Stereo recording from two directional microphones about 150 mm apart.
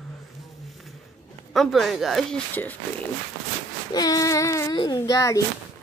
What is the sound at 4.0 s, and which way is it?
Child singing, 25° left (ahead or behind).